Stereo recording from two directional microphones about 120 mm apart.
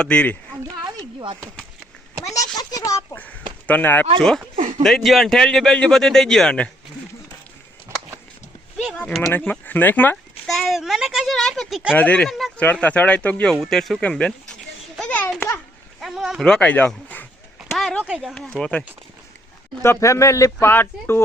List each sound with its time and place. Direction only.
0.0 s speech: 10° left (ahead or behind)
2.2 s speech: 30° left (ahead or behind)
3.7 s a man's voice: 15° left (ahead or behind)
4.5 s speech: 90° right
4.8 s a man's voice: centre (ahead or behind)
9.0 s speech: 10° left (ahead or behind)
10.4 s a man's voice: 5° left (ahead or behind)
14.9 s a sound: 5° left (ahead or behind)
15.4 s a sound: 20° left (ahead or behind)
16.0 s speech: 5° right (ahead or behind); by 17.2 s 15° left (ahead or behind)
17.6 s a sound: centre (ahead or behind)
18.0 s a man's voice: 5° right (ahead or behind)
18.3 s speech: 10° left (ahead or behind)
19.8 s speech: 25° left (ahead or behind)